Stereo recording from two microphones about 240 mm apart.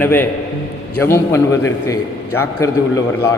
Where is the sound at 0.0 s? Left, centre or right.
Centre.